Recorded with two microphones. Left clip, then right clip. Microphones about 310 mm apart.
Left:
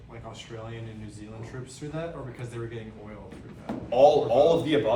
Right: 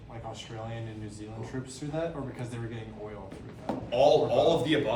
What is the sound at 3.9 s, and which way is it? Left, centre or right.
Speech, centre.